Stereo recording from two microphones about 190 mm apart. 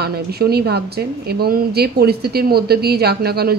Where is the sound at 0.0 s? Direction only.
55° right (ahead or behind).